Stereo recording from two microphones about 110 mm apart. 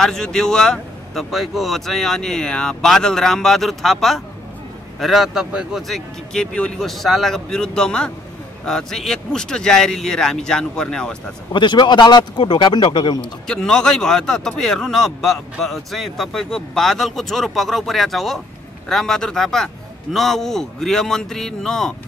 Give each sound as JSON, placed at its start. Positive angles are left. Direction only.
{"t": 0.0, "sound": "a man's voice", "side_deg": 5}
{"t": 11.5, "sound": "speech", "side_deg": 45}
{"t": 13.2, "sound": "a man's voice", "side_deg": 5}